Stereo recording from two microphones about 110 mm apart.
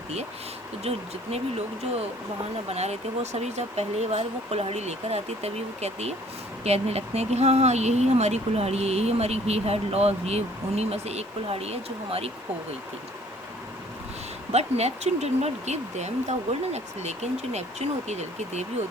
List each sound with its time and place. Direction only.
0.9 s speech: 70° right (ahead or behind)
14.5 s speech: 80° right